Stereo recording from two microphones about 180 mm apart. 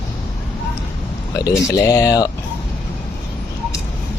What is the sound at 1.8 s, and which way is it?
Speech, 20° left (ahead or behind).